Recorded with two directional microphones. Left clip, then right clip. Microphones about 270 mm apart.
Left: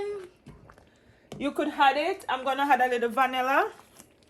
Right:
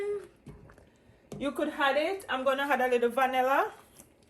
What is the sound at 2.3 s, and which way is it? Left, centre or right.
Speech, left.